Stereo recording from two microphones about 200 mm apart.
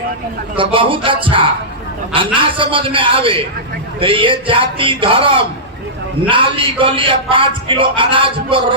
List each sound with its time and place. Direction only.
0.5 s a man's voice: 25° right (ahead or behind)